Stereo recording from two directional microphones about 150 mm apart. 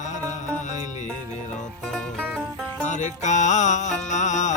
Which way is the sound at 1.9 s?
Centre (ahead or behind).